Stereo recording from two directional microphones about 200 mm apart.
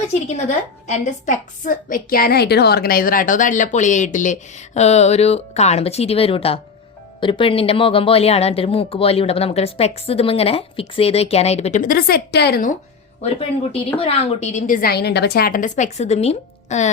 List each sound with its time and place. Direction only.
0.1 s a woman's voice: 35° left (ahead or behind); by 12.7 s 50° left (ahead or behind)
14.0 s a woman's voice: 30° left (ahead or behind)